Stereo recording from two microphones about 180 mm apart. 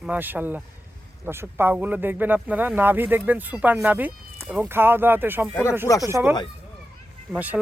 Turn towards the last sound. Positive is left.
turn(degrees=-10)  # may be behind; listen again after turning